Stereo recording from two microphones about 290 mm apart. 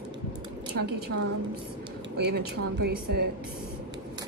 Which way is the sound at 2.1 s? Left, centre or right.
Right.